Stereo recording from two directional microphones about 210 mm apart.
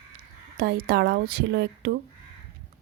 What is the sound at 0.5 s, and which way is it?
Speech, 50° right (ahead or behind).